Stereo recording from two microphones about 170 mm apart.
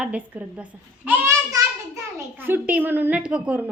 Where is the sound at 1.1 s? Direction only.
15° right (ahead or behind).